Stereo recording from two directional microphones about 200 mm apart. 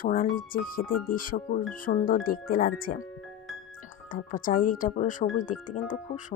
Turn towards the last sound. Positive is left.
turn(degrees=40)  # may be behind; listen again after turning